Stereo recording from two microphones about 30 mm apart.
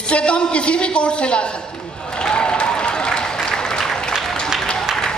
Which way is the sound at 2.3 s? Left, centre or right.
Left.